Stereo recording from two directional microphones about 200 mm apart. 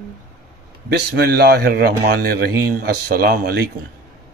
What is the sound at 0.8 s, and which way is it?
A man's voice, 50° right (ahead or behind).